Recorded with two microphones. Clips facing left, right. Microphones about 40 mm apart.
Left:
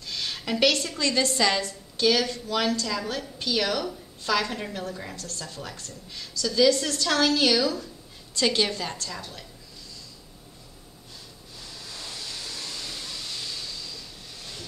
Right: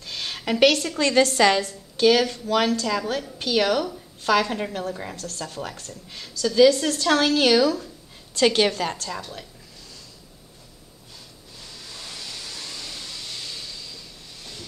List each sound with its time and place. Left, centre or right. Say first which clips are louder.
0.0 s a woman's voice: right 2 dB; right
5.1 s speech: right 4 dB; right
6.4 s a woman's voice: right 5 dB; right
11.8 s vehicle: right 1 dB; centre
14.4 s vehicle: right 1 dB; centre